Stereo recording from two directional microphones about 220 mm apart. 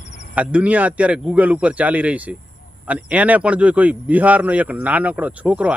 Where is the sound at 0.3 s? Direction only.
5° right (ahead or behind).